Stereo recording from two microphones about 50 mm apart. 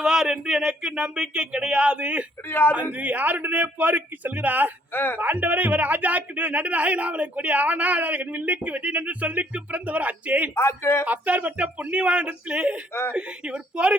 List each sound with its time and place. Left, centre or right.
0.0 s speech: centre
2.5 s speech: left
2.9 s speech: right
4.9 s speech: left
5.2 s speech: right
10.5 s speech: left
11.0 s speech: right
12.9 s speech: left
13.1 s speech: right